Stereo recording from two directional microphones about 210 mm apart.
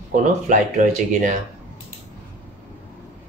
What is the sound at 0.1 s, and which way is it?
Speech, 35° right (ahead or behind).